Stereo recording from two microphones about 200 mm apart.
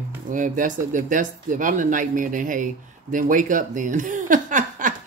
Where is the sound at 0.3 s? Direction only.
40° right (ahead or behind).